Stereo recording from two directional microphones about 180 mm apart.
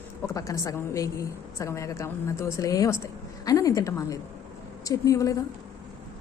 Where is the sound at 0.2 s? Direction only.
15° left (ahead or behind).